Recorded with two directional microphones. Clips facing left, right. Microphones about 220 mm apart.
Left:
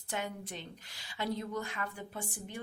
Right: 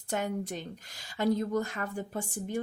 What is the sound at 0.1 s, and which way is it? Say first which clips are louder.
A woman's voice: right 7 dB; 45° right (ahead or behind).